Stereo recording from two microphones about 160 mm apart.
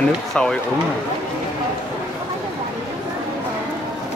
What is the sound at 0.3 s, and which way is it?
Speech, 5° left (ahead or behind).